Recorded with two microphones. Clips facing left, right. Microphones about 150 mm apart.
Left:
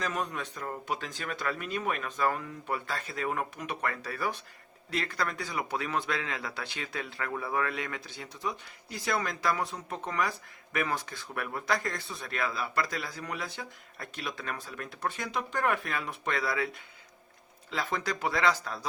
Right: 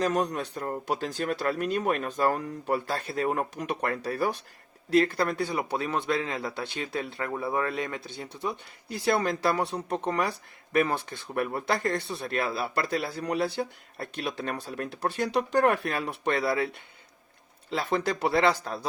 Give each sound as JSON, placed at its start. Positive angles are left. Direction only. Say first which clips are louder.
{"t": 0.0, "sound": "speech", "louder": "right 7 dB", "side_deg": -40}
{"t": 17.7, "sound": "speech", "louder": "right 5 dB", "side_deg": -30}